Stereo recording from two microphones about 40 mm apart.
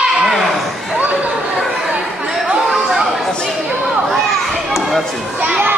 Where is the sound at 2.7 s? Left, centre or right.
Centre.